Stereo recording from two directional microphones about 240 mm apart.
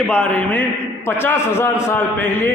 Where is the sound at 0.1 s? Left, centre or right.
Centre.